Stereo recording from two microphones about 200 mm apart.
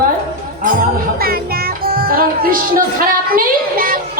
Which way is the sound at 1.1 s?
50° right (ahead or behind).